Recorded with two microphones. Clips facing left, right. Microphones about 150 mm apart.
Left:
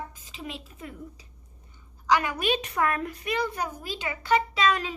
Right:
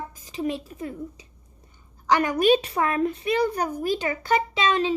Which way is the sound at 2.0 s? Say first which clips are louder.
Right 5 dB; 45° right (ahead or behind).